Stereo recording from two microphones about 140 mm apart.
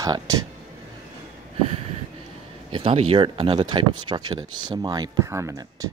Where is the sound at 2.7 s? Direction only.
40° right (ahead or behind); by 5.8 s 25° right (ahead or behind).